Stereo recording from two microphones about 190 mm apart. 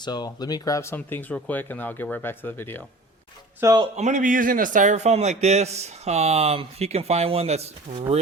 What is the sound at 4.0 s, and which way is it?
A man's voice, 40° right (ahead or behind).